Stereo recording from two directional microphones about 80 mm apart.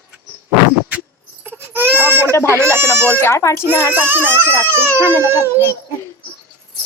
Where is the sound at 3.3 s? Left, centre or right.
Left.